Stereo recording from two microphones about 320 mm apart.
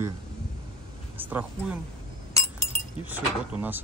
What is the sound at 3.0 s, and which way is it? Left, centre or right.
Speech, centre.